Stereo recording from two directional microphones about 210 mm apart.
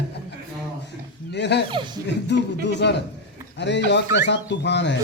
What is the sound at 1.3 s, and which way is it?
Speech, 55° left (ahead or behind).